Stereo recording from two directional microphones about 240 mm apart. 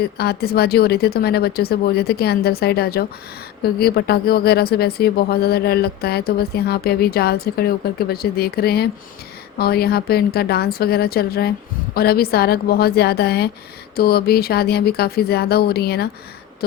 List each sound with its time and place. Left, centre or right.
0.2 s speech: left